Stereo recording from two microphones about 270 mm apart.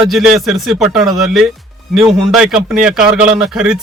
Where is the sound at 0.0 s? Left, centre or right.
Centre.